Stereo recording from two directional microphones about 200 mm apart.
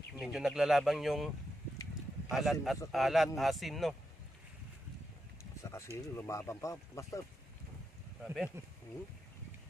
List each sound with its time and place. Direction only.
0.1 s speech: centre (ahead or behind)
5.6 s a sound: 15° left (ahead or behind)
6.1 s speech: 15° left (ahead or behind)
8.6 s speech: 15° right (ahead or behind)